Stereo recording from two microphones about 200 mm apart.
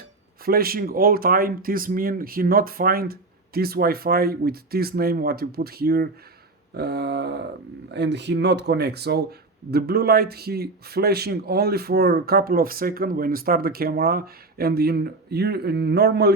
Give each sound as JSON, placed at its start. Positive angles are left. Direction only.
{"t": 0.4, "sound": "a man's voice", "side_deg": -50}